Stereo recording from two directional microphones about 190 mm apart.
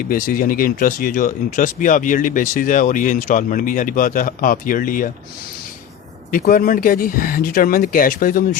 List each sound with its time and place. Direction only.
0.1 s speech: 45° left (ahead or behind)
6.3 s speech: 50° left (ahead or behind)